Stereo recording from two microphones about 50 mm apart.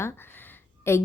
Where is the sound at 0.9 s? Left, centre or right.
Left.